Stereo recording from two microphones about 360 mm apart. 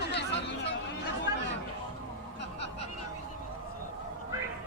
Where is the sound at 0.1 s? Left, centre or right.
Left.